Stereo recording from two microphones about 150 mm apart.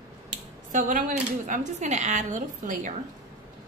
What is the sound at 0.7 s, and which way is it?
Speech, 60° right (ahead or behind).